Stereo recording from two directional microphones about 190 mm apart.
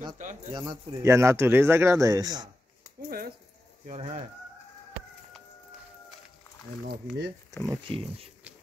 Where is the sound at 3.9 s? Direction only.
30° right (ahead or behind).